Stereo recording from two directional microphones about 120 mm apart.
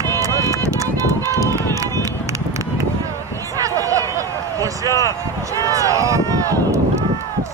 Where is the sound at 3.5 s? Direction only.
30° right (ahead or behind).